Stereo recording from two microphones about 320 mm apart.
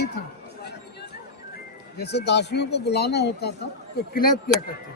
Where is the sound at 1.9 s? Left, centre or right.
Left.